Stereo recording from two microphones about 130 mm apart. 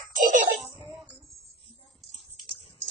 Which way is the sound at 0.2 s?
90° right.